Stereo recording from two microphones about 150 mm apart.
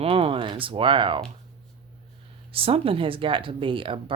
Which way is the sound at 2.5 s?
40° right (ahead or behind).